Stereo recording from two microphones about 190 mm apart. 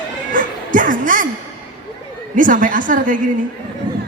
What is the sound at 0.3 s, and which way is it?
Music, 45° right (ahead or behind).